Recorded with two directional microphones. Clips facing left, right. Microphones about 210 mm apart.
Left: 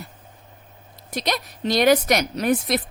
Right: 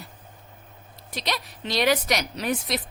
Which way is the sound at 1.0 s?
45° left (ahead or behind).